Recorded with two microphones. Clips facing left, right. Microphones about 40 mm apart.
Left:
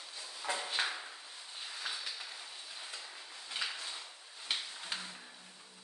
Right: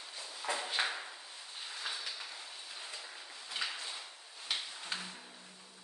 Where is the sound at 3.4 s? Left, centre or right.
Centre.